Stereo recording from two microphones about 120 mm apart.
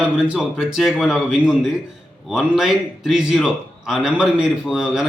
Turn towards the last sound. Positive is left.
turn(degrees=-5)  # may be behind; listen again after turning